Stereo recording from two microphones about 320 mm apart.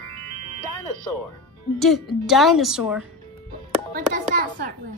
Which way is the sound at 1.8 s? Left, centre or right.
Centre.